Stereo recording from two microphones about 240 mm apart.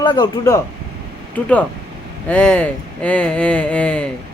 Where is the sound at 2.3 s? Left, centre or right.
Centre.